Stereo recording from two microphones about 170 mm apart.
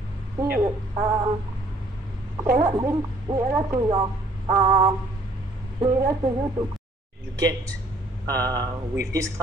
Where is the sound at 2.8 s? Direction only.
15° right (ahead or behind).